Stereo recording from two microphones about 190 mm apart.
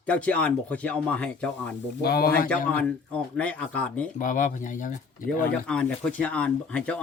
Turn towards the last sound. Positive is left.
turn(degrees=5)  # may be behind; listen again after turning